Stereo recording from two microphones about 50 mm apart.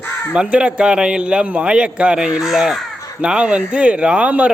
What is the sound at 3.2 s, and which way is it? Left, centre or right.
Speech, centre.